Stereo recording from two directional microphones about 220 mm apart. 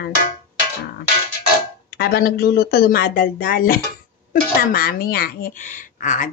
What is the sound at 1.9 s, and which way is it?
Speech, 45° left (ahead or behind).